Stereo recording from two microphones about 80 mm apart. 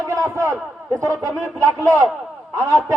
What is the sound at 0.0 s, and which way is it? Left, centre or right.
A man's voice, right.